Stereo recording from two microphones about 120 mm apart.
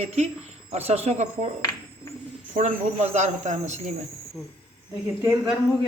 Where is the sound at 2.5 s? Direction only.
75° right (ahead or behind).